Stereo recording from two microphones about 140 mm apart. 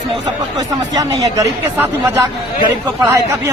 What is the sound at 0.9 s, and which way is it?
Speech, 25° right (ahead or behind).